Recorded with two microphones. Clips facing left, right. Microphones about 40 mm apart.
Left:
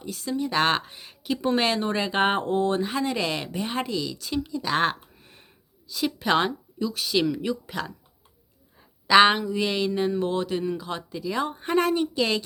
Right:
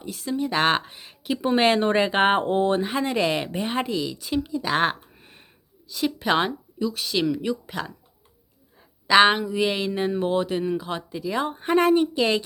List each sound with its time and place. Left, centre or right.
0.0 s speech: centre
1.6 s speech: right; by 7.9 s centre
9.0 s speech: centre